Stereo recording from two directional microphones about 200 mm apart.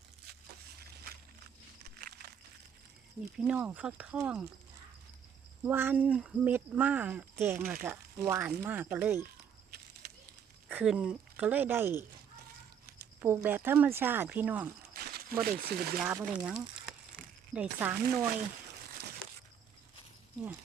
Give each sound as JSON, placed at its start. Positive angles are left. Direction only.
{"t": 0.8, "sound": "a sound", "side_deg": -50}
{"t": 3.3, "sound": "speech", "side_deg": -5}
{"t": 5.6, "sound": "speech", "side_deg": -10}
{"t": 10.7, "sound": "speech", "side_deg": -5}
{"t": 13.2, "sound": "speech", "side_deg": -10}
{"t": 14.9, "sound": "a sound", "side_deg": -50}
{"t": 15.4, "sound": "speech", "side_deg": -50}
{"t": 16.0, "sound": "speech", "side_deg": 0}